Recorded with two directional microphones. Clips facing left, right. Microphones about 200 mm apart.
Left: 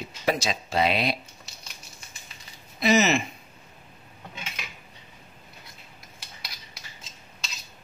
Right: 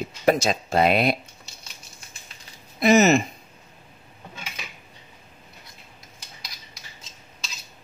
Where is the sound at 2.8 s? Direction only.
50° right (ahead or behind).